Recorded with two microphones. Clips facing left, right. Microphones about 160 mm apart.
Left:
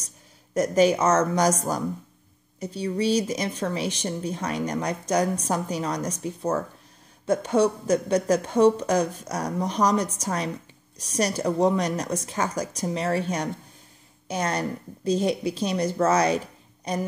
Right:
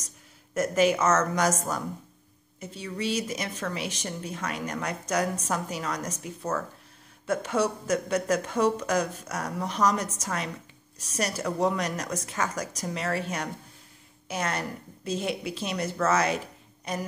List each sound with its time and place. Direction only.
0.6 s speech: 30° left (ahead or behind)
14.2 s speech: 30° left (ahead or behind)